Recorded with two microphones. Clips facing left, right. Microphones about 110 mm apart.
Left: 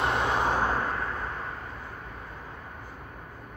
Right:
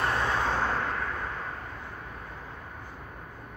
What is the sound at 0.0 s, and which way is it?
Vehicle, 20° left (ahead or behind).